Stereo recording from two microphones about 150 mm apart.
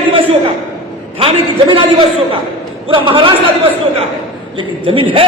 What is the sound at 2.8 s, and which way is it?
A man's voice, 35° right (ahead or behind).